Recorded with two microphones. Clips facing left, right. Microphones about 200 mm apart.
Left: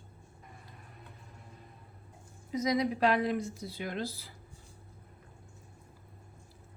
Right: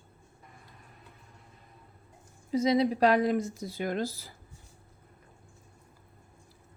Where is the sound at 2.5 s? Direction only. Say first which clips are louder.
Right 5 dB; 30° right (ahead or behind); by 4.3 s 45° right (ahead or behind).